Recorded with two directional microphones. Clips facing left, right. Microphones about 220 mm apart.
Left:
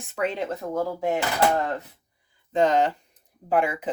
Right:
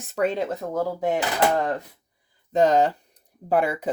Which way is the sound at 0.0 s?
40° right (ahead or behind).